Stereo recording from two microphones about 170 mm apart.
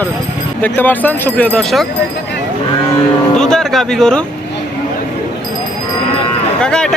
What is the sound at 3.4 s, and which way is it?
Speech, 5° left (ahead or behind).